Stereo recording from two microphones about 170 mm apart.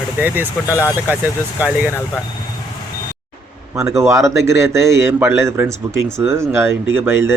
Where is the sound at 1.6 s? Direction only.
10° right (ahead or behind).